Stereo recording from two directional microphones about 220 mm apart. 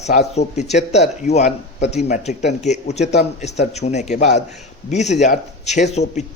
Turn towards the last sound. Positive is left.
turn(degrees=30)  # may be behind; listen again after turning